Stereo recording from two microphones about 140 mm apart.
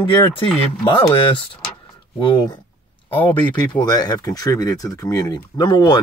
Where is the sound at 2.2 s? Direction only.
30° left (ahead or behind).